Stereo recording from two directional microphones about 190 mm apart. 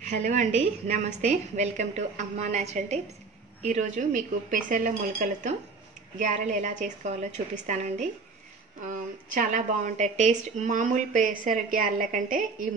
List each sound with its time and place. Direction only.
0.0 s a woman's voice: 40° right (ahead or behind)
9.3 s a woman's voice: 40° right (ahead or behind)